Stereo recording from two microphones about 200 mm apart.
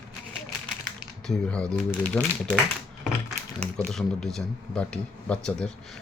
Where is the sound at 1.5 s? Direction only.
5° left (ahead or behind).